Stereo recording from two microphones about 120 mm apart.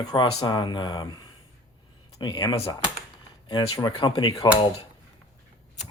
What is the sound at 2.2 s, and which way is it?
Speech, 40° left (ahead or behind).